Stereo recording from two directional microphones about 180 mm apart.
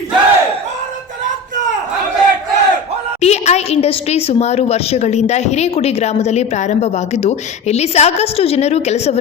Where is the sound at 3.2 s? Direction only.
35° left (ahead or behind).